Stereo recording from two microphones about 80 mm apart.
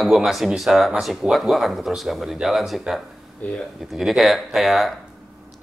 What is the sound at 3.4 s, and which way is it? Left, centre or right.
Speech, left.